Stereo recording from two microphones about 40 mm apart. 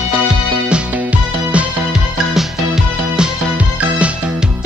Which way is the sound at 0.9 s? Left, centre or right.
Right.